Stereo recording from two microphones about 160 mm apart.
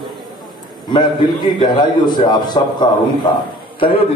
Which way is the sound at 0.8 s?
30° left (ahead or behind).